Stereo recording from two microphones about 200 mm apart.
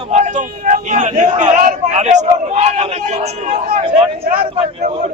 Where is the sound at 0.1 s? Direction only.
35° right (ahead or behind).